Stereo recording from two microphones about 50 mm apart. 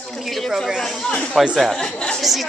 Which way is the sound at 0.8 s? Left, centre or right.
Centre.